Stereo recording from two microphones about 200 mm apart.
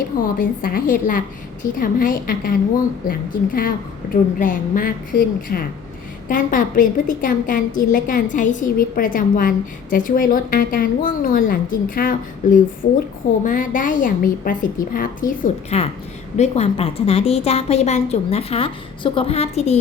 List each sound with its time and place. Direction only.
0.2 s a woman's voice: 45° left (ahead or behind)
15.7 s a woman's voice: 30° left (ahead or behind)